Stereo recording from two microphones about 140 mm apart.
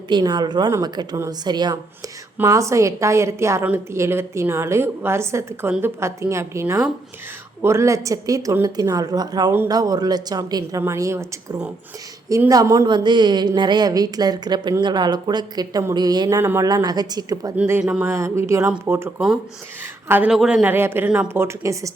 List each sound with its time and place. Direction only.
0.1 s a woman's voice: 30° right (ahead or behind)
16.4 s speech: 15° right (ahead or behind)
16.6 s a woman's voice: 30° right (ahead or behind)
17.6 s a woman's voice: 10° right (ahead or behind)